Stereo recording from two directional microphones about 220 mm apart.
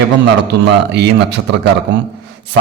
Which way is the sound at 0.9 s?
50° right (ahead or behind).